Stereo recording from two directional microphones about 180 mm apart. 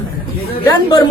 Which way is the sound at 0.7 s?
20° left (ahead or behind).